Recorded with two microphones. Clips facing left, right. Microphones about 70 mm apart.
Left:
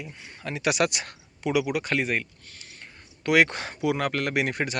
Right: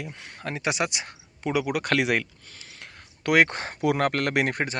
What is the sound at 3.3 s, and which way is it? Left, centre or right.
Speech, right.